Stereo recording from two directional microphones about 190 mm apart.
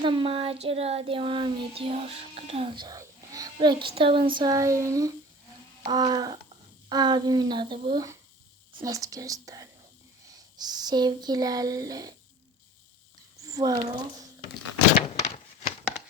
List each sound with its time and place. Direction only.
0.0 s child singing: 25° right (ahead or behind)
8.8 s speech: 15° right (ahead or behind)
10.6 s child singing: 20° right (ahead or behind)
13.5 s speech: 20° right (ahead or behind)
13.7 s child singing: 25° right (ahead or behind)